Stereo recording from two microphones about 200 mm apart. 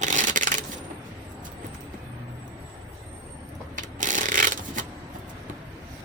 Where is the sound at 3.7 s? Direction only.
40° right (ahead or behind).